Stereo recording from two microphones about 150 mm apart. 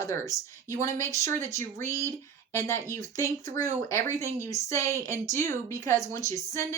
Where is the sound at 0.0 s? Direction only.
20° left (ahead or behind).